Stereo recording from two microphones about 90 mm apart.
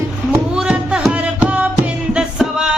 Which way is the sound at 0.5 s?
10° right (ahead or behind).